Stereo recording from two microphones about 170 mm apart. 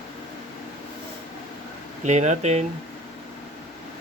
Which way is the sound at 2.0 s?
45° right (ahead or behind).